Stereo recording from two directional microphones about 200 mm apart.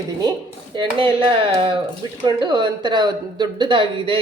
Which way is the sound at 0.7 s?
25° right (ahead or behind).